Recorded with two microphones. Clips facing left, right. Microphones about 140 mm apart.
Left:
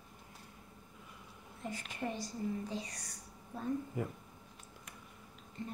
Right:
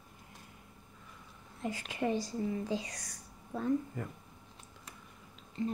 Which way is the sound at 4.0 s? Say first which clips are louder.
Left 3 dB; 10° left (ahead or behind).